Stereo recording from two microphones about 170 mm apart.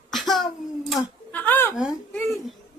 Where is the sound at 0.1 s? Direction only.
Centre (ahead or behind).